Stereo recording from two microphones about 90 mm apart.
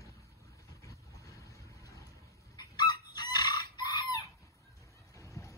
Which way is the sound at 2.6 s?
55° left (ahead or behind).